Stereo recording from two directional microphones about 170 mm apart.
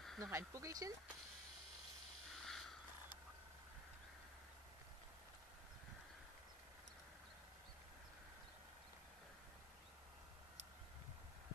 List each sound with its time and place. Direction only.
0.2 s speech: 15° right (ahead or behind)
2.3 s mechanisms: centre (ahead or behind)